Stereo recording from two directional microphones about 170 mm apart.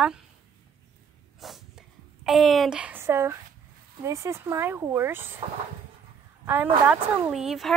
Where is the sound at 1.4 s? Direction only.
Centre (ahead or behind).